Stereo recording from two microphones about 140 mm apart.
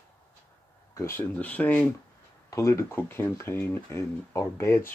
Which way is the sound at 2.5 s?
20° left (ahead or behind).